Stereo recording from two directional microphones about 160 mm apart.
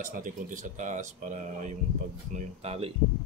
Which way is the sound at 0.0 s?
55° right (ahead or behind).